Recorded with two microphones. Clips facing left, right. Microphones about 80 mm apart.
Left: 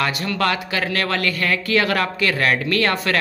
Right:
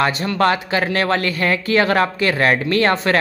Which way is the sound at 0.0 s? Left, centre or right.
Right.